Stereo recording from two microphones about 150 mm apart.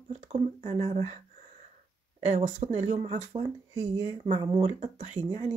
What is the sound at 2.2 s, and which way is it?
Speech, 50° right (ahead or behind).